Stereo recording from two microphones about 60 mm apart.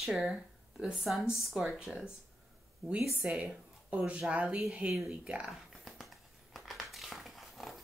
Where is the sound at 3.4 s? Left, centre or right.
Right.